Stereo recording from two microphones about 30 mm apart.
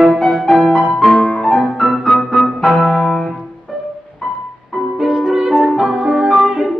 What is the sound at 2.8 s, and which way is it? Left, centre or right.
Music, centre.